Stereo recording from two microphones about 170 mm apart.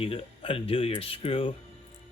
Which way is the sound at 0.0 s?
35° left (ahead or behind).